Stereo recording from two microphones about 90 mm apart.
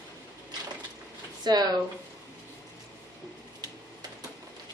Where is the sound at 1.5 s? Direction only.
50° right (ahead or behind).